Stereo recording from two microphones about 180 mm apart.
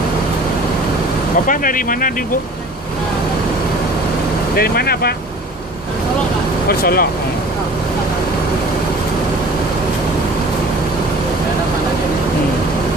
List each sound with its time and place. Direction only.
1.5 s speech: 50° left (ahead or behind)
4.5 s speech: 60° left (ahead or behind)
6.7 s speech: 55° left (ahead or behind)